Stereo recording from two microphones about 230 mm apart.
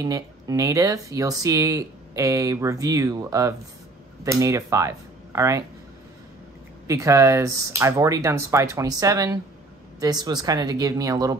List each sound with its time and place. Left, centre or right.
0.0 s speech: centre
6.9 s speech: centre